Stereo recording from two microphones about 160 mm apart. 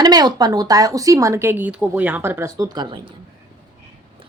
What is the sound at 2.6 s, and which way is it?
Speech, 25° right (ahead or behind).